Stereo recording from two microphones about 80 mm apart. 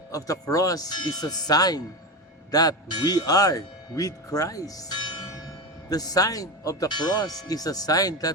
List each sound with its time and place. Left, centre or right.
0.1 s speech: left
4.9 s church bell: left
5.9 s speech: left
6.8 s speech: left